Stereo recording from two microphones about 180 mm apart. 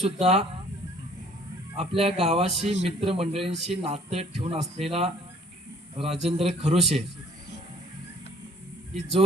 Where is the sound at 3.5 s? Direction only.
Centre (ahead or behind).